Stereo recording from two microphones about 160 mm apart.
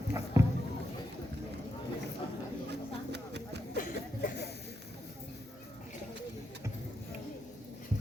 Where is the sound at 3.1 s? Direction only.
90° right.